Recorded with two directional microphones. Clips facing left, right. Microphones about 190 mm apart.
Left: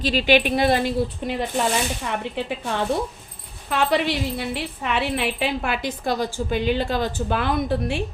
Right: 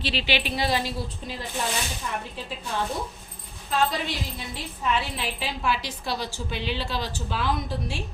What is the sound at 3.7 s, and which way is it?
A woman's voice, 70° left (ahead or behind).